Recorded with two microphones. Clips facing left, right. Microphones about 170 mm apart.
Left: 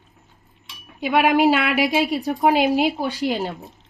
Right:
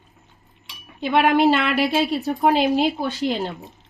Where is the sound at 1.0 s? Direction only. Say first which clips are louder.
Even; 10° left (ahead or behind).